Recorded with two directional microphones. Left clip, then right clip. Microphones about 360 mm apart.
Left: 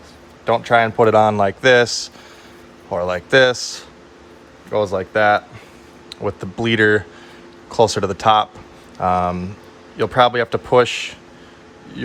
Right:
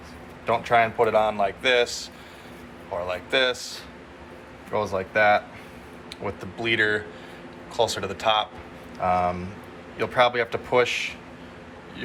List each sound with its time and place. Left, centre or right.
0.4 s a man's voice: left
3.1 s a man's voice: left